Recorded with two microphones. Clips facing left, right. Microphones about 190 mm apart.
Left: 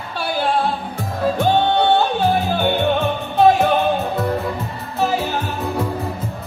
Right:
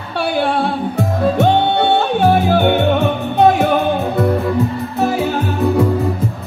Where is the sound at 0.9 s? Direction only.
70° right (ahead or behind).